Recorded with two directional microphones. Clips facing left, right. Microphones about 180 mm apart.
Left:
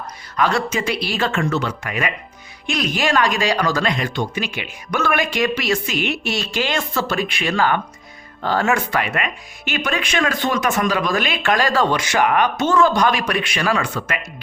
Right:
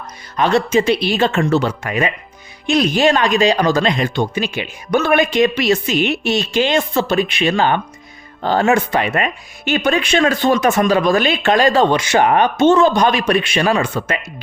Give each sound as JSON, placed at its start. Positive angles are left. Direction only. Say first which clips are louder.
{"t": 0.3, "sound": "speech", "louder": "right 5 dB", "side_deg": -25}